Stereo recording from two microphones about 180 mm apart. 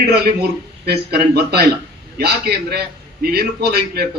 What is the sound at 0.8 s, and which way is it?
A man's voice, 65° right (ahead or behind).